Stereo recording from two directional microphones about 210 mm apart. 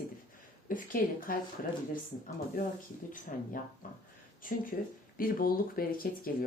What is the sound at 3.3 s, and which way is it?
A woman's voice, 40° left (ahead or behind).